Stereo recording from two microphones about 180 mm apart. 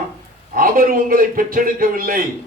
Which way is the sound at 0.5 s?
50° right (ahead or behind).